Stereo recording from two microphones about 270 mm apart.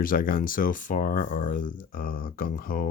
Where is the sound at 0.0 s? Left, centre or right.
Left.